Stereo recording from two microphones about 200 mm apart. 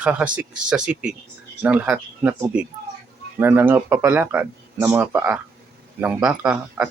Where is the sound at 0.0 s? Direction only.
5° right (ahead or behind).